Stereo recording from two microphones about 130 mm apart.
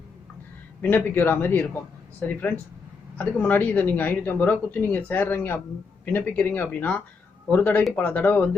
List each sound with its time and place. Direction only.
0.8 s speech: 15° left (ahead or behind)